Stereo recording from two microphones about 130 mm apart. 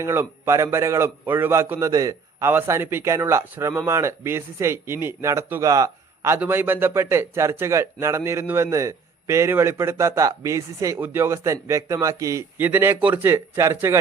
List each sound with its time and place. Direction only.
0.0 s speech: 20° right (ahead or behind)